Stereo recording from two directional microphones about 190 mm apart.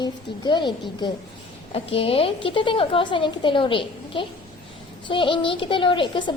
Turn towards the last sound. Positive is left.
turn(degrees=25)  # may be behind; listen again after turning